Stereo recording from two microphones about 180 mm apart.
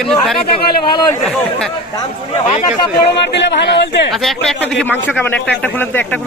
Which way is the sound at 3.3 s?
70° left (ahead or behind).